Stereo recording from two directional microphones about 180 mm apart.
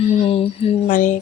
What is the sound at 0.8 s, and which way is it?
Speech, 45° left (ahead or behind).